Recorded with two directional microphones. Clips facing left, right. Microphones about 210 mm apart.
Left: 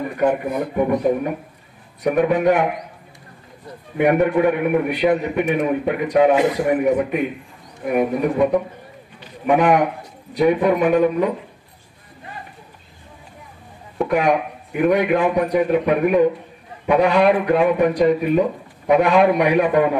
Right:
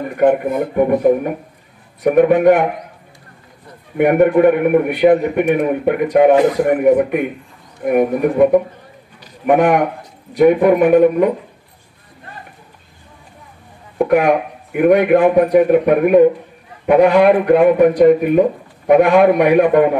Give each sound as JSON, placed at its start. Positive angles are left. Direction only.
{"t": 0.2, "sound": "a man's voice", "side_deg": -55}
{"t": 4.0, "sound": "a man's voice", "side_deg": -50}
{"t": 9.2, "sound": "a sound", "side_deg": -50}
{"t": 10.3, "sound": "a man's voice", "side_deg": -55}
{"t": 14.0, "sound": "a man's voice", "side_deg": -55}